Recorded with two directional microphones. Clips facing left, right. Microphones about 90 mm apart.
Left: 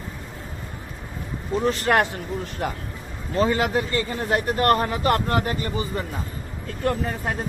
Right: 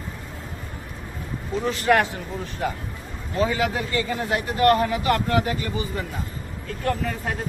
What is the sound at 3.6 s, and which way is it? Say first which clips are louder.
Speech: left 1 dB; 40° left (ahead or behind).